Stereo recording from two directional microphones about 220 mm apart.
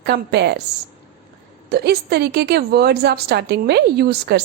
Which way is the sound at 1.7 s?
45° right (ahead or behind).